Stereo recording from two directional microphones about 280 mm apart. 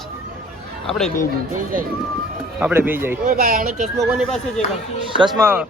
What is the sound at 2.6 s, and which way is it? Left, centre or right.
Speech, centre.